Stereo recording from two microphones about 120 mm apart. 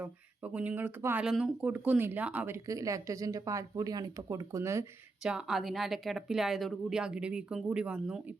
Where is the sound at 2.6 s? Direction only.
25° right (ahead or behind).